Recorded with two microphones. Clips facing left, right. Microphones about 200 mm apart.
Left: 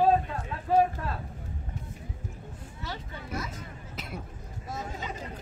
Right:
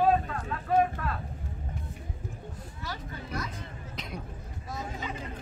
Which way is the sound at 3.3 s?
5° left (ahead or behind).